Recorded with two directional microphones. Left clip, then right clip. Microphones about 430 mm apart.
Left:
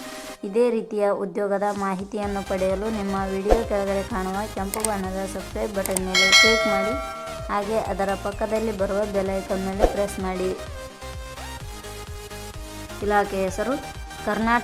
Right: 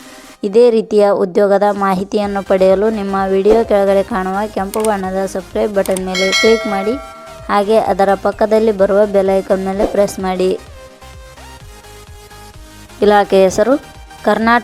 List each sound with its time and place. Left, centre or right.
0.4 s a woman's voice: centre
5.8 s speech: centre
7.4 s a woman's voice: centre
13.1 s a woman's voice: centre